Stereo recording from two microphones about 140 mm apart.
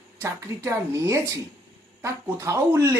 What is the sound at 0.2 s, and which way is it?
A man's voice, 20° right (ahead or behind).